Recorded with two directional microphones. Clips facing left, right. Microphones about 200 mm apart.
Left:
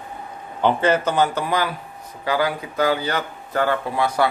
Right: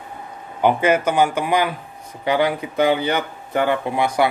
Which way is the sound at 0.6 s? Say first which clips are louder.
Right 2 dB; 10° right (ahead or behind).